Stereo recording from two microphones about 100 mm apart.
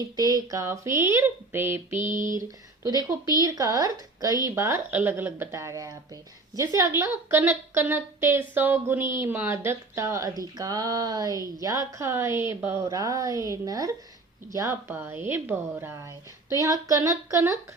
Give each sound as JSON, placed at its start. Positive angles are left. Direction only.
{"t": 0.0, "sound": "a woman's voice", "side_deg": -35}
{"t": 2.8, "sound": "a woman's voice", "side_deg": -40}
{"t": 12.9, "sound": "speech", "side_deg": -35}
{"t": 14.8, "sound": "a woman's voice", "side_deg": -20}